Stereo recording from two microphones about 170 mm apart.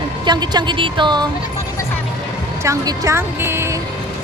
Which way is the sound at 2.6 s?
20° right (ahead or behind).